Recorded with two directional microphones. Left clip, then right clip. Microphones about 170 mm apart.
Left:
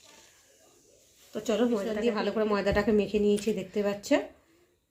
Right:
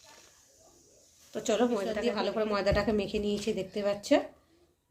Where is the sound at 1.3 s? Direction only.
25° left (ahead or behind).